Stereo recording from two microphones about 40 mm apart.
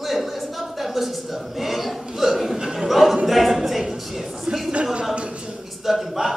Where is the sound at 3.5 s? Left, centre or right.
Centre.